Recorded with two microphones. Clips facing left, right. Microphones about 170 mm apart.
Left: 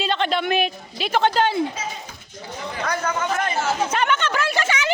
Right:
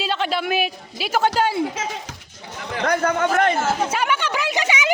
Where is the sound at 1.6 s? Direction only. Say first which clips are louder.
Right 2 dB; 90° right.